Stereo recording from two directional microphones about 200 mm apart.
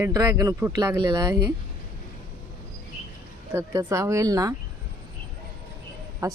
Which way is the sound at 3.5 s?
15° right (ahead or behind).